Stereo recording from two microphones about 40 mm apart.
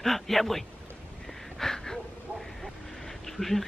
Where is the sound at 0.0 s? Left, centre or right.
Centre.